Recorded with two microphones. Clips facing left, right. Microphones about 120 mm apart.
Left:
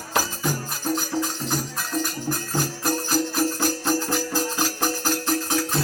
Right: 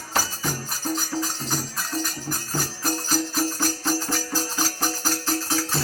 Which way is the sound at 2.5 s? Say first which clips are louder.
Left 2 dB; 40° right (ahead or behind).